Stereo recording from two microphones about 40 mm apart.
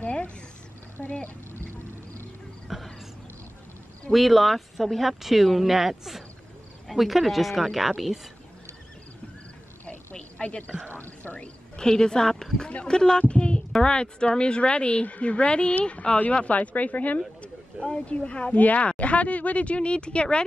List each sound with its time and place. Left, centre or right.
0.0 s cat: left
1.0 s a sound: left
2.7 s speech: centre
4.1 s speech: centre
10.1 s a sound: left
11.0 s speech: left
11.3 s speech: left
13.2 s a sound: left
13.7 s speech: left
17.4 s speech: left